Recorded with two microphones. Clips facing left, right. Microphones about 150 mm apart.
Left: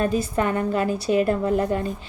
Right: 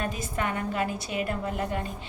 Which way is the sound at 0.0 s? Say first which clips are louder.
Left 8 dB; 35° left (ahead or behind).